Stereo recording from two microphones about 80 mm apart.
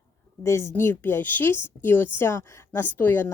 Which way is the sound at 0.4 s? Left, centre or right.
Left.